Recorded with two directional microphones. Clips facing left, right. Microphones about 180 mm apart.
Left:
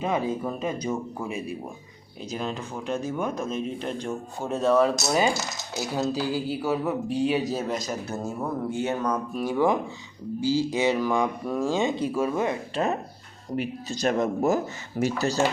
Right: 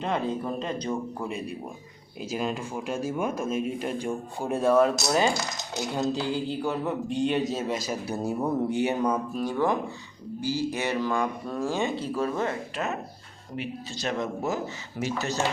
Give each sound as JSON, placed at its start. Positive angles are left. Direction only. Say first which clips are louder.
{"t": 0.0, "sound": "speech", "louder": "left 2 dB", "side_deg": 5}
{"t": 2.3, "sound": "a man's voice", "louder": "right 2 dB", "side_deg": -5}
{"t": 7.9, "sound": "speech", "louder": "right 1 dB", "side_deg": -15}
{"t": 9.4, "sound": "speech", "louder": "left 4 dB", "side_deg": 10}
{"t": 10.8, "sound": "speech", "louder": "left 4 dB", "side_deg": 15}
{"t": 12.7, "sound": "speech", "louder": "left 5 dB", "side_deg": 30}
{"t": 13.6, "sound": "speech", "louder": "left 5 dB", "side_deg": 45}